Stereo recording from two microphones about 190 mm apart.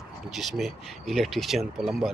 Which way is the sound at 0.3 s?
Centre (ahead or behind).